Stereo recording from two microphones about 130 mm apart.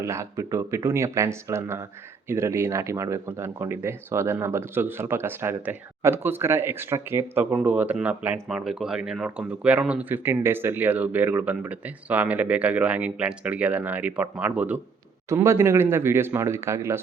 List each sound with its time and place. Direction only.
0.0 s speech: 20° right (ahead or behind)